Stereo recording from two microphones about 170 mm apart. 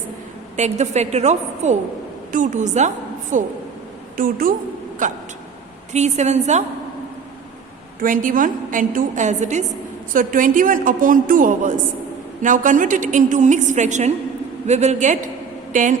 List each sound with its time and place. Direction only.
0.5 s a woman's voice: 40° right (ahead or behind)
8.0 s a woman's voice: 50° right (ahead or behind)